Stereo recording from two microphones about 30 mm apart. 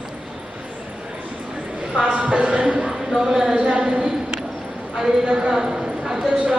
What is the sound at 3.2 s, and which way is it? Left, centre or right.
Speech, right.